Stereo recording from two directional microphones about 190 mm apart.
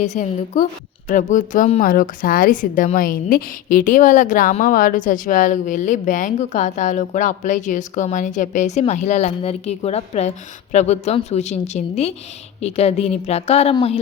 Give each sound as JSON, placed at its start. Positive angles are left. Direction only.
{"t": 0.0, "sound": "a woman's voice", "side_deg": 40}